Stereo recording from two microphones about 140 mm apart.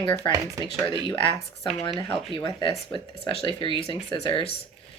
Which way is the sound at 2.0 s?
Centre (ahead or behind).